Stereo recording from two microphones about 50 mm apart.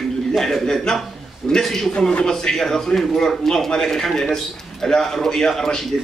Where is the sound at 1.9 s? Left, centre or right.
Centre.